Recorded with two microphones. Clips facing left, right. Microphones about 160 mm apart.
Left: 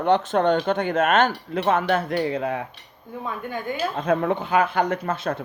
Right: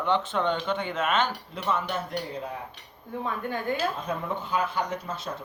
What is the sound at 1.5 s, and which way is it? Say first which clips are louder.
Speech: left 8 dB; 70° left (ahead or behind).